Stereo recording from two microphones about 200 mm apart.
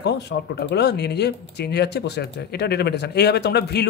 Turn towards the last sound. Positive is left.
turn(degrees=55)  # may be behind; listen again after turning